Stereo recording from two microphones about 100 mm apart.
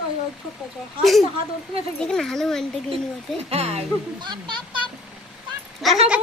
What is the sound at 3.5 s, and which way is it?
Speech, 90° right.